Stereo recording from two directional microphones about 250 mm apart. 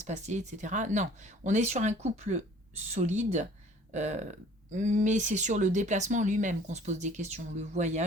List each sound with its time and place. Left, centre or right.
0.0 s speech: right